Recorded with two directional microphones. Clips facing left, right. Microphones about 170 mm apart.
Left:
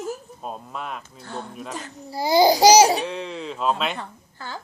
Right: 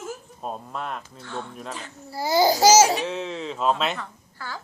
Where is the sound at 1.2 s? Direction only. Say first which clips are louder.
Left 1 dB; 40° left (ahead or behind).